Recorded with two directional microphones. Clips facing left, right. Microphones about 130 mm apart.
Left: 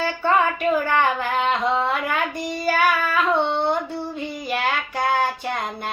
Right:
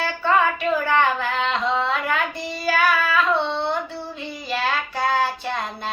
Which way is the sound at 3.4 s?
50° left (ahead or behind).